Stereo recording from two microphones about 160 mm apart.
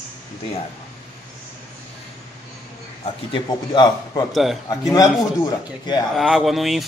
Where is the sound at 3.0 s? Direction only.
30° left (ahead or behind).